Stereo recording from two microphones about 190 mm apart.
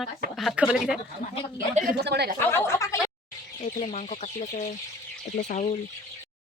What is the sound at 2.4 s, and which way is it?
Speech, 10° left (ahead or behind).